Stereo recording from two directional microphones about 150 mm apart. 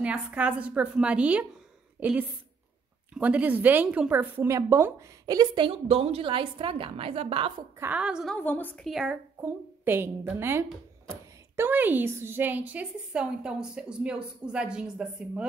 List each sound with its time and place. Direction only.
0.0 s a woman's voice: 10° right (ahead or behind); by 7.5 s 40° right (ahead or behind)
7.8 s a woman's voice: 10° right (ahead or behind)
8.4 s a woman's voice: 15° left (ahead or behind)
8.8 s a woman's voice: 5° right (ahead or behind)